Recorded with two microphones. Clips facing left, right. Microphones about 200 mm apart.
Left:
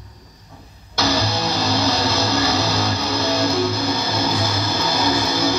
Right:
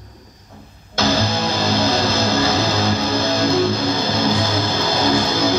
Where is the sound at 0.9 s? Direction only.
50° right (ahead or behind).